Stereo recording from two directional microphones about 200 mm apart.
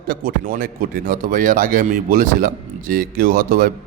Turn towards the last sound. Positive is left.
turn(degrees=-45)  # may be behind; listen again after turning